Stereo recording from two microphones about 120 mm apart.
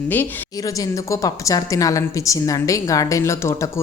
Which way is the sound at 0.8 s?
30° left (ahead or behind).